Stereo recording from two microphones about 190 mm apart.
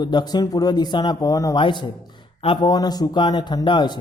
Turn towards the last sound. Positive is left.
turn(degrees=25)  # may be behind; listen again after turning